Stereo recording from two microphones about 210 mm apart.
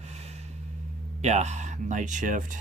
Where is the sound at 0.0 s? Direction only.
30° right (ahead or behind).